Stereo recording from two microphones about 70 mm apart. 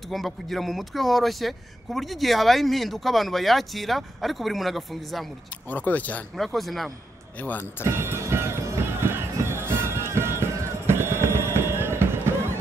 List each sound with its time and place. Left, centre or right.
0.1 s speech: centre
5.7 s speech: left
6.3 s speech: centre
7.9 s music: right